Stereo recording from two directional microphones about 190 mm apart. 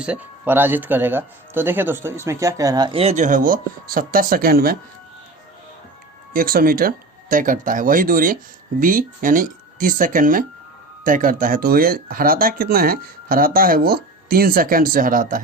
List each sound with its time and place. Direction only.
0.0 s speech: 10° right (ahead or behind); by 4.8 s 50° right (ahead or behind)
6.3 s speech: 50° right (ahead or behind)